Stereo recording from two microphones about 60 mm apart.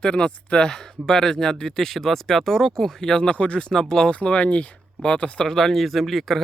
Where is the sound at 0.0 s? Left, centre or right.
Centre.